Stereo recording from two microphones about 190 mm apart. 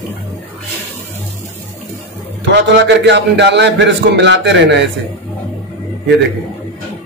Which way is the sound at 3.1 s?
65° right (ahead or behind).